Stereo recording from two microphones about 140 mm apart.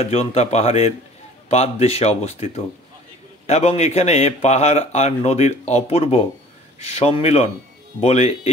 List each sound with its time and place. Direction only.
0.0 s a man's voice: 50° left (ahead or behind)